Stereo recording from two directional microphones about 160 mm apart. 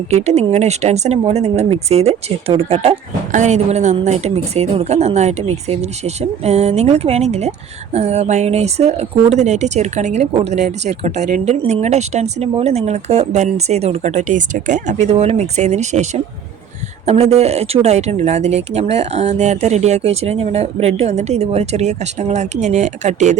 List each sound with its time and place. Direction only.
0.1 s speech: 40° right (ahead or behind)
17.1 s speech: 40° right (ahead or behind)